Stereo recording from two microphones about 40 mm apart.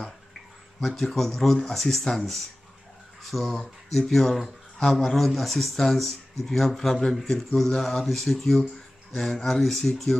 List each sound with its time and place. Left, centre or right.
0.7 s speech: centre